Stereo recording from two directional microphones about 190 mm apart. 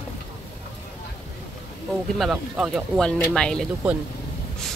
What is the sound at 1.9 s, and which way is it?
Speech, centre (ahead or behind).